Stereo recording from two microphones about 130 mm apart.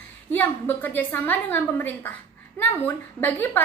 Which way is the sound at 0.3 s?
15° left (ahead or behind).